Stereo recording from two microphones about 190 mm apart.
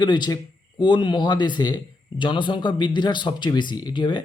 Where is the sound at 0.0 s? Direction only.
20° left (ahead or behind).